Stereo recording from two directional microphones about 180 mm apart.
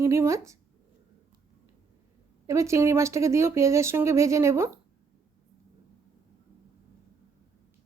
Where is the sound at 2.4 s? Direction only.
15° right (ahead or behind).